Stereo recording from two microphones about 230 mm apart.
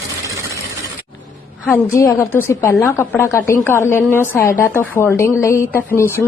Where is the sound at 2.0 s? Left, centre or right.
Centre.